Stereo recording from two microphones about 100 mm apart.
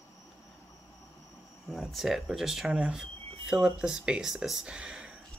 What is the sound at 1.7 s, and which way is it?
Speech, centre (ahead or behind).